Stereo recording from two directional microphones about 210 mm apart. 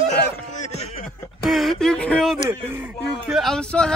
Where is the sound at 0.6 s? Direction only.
35° left (ahead or behind).